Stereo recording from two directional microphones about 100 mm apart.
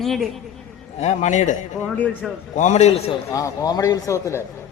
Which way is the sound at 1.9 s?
15° left (ahead or behind).